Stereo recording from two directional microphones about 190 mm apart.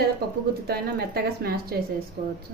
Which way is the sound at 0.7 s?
55° right (ahead or behind).